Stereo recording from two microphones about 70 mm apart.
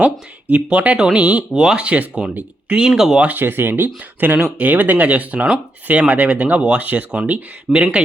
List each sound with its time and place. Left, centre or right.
0.5 s speech: centre
3.2 s speech: right